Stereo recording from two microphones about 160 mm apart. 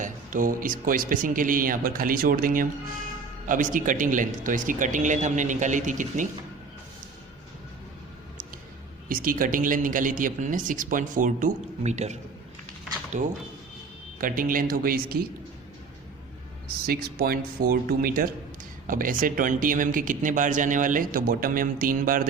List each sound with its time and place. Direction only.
0.0 s a man's voice: 55° right (ahead or behind)
9.0 s a man's voice: 60° right (ahead or behind); by 12.1 s 45° right (ahead or behind)
13.1 s speech: 50° right (ahead or behind)
14.2 s a man's voice: 60° right (ahead or behind)
16.6 s a man's voice: 70° right (ahead or behind)